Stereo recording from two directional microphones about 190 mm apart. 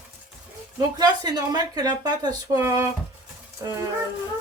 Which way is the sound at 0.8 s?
20° right (ahead or behind).